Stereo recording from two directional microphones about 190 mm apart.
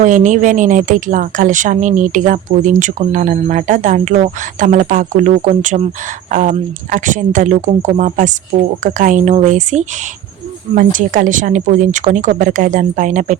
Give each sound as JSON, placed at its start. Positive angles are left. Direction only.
{"t": 0.0, "sound": "speech", "side_deg": -40}